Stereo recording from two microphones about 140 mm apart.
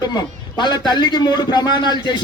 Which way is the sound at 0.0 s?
30° left (ahead or behind).